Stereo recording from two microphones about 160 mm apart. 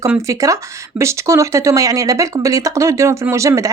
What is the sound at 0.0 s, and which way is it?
A woman's voice, 20° right (ahead or behind).